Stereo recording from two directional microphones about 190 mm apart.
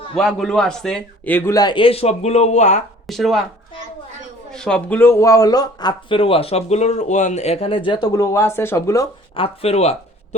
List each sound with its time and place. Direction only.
0.2 s a man's voice: centre (ahead or behind); by 2.8 s 35° left (ahead or behind)
3.1 s speech: centre (ahead or behind)
4.5 s speech: 5° left (ahead or behind)
9.3 s speech: 30° left (ahead or behind)